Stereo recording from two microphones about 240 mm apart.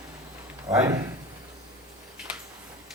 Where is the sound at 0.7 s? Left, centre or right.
Centre.